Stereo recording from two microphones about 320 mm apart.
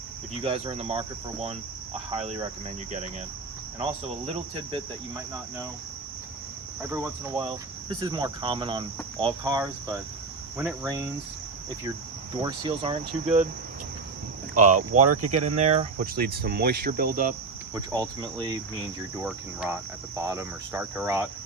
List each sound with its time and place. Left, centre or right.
0.4 s cricket: centre
6.9 s cricket: centre
12.4 s cricket: centre
14.5 s cricket: right
15.0 s speech: right
15.5 s cricket: right
17.7 s cricket: centre